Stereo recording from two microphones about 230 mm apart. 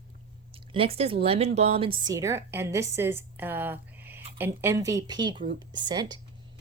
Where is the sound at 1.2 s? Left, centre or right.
Right.